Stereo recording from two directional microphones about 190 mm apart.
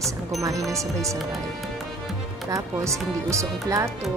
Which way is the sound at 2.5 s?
15° right (ahead or behind).